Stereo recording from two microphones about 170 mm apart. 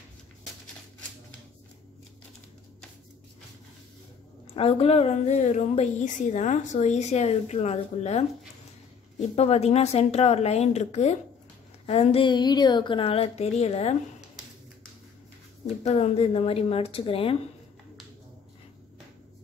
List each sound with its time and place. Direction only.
4.6 s a woman's voice: 35° left (ahead or behind)
9.3 s a woman's voice: 40° left (ahead or behind)
15.8 s a woman's voice: 40° left (ahead or behind)